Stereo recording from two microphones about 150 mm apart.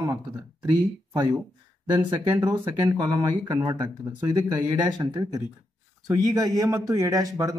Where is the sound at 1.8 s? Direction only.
30° right (ahead or behind).